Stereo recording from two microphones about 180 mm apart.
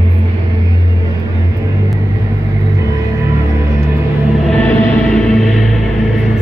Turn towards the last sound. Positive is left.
turn(degrees=5)  # may be behind; listen again after turning